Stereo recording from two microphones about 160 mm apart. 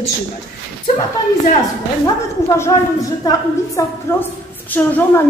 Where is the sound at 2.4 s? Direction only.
15° left (ahead or behind).